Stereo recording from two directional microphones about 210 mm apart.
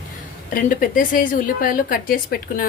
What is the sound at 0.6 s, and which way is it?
A woman's voice, 40° left (ahead or behind).